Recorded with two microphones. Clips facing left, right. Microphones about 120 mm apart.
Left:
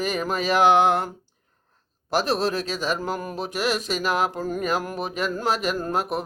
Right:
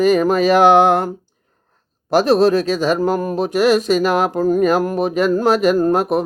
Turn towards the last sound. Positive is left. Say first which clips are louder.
# right 10 dB
turn(degrees=-55)  # may be behind; listen again after turning